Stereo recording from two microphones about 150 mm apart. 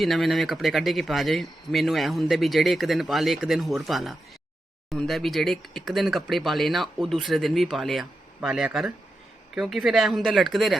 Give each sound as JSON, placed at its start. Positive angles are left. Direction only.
{"t": 0.0, "sound": "speech", "side_deg": 0}